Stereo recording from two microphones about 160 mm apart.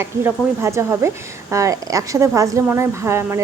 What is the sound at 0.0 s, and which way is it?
A woman's voice, 15° right (ahead or behind).